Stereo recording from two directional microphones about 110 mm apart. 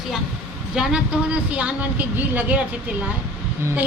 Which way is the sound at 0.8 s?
5° right (ahead or behind).